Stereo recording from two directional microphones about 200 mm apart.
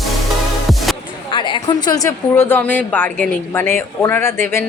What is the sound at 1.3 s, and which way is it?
A woman's voice, 25° left (ahead or behind).